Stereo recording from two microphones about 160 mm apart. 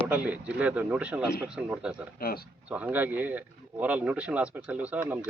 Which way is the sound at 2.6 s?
10° right (ahead or behind).